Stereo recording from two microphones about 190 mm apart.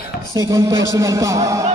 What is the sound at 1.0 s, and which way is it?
Speech, 15° right (ahead or behind).